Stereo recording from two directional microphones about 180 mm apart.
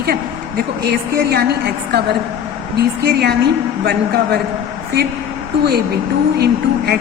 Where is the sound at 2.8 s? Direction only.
60° right (ahead or behind).